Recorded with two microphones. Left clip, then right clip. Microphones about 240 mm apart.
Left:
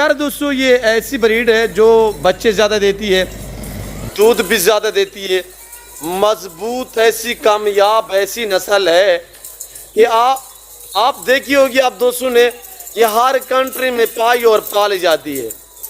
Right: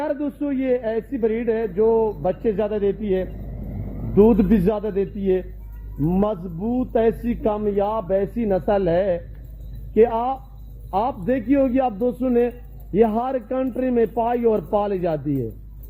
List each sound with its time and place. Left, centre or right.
0.0 s speech: centre
1.8 s speech: left
2.2 s speech: centre
4.4 s speech: centre
6.1 s speech: left
7.0 s speech: centre